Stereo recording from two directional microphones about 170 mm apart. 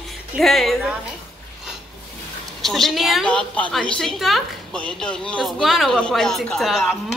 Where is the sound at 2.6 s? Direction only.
Centre (ahead or behind).